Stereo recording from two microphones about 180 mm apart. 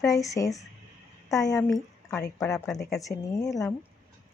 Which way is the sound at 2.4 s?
Centre (ahead or behind).